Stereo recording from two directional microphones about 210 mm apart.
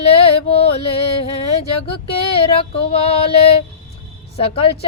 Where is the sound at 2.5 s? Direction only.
25° left (ahead or behind).